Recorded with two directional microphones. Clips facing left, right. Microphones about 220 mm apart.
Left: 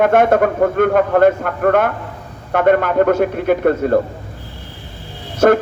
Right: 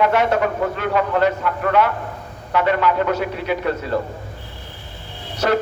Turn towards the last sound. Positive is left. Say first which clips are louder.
# left 7 dB
turn(degrees=50)  # may be behind; listen again after turning